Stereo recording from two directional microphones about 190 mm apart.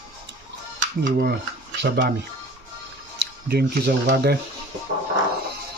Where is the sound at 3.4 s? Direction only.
60° right (ahead or behind).